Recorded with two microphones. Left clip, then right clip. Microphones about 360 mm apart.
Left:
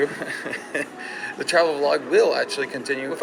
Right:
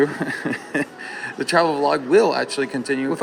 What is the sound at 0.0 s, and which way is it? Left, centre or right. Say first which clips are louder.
Speech: right 4 dB; right.